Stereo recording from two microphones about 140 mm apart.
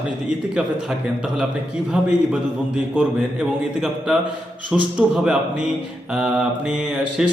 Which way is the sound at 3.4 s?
5° right (ahead or behind).